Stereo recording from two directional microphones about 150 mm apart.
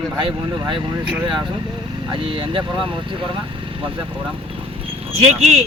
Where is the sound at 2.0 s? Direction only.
35° right (ahead or behind).